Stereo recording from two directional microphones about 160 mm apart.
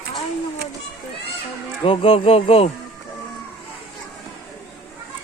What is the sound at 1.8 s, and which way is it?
Speech, 35° left (ahead or behind).